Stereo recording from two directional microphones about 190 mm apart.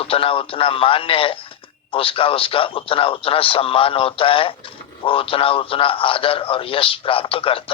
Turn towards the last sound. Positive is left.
turn(degrees=30)  # may be behind; listen again after turning